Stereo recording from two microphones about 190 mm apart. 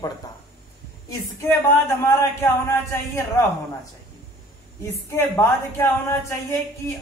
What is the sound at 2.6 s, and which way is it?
Speech, 15° left (ahead or behind).